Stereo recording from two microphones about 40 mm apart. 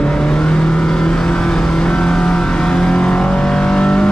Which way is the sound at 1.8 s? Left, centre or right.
Left.